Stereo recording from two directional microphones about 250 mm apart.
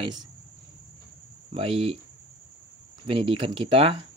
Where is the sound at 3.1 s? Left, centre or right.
Right.